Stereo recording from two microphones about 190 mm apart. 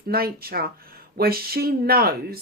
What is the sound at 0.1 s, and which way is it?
Speech, 50° right (ahead or behind).